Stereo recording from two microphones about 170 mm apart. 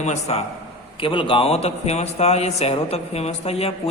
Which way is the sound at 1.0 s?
30° left (ahead or behind).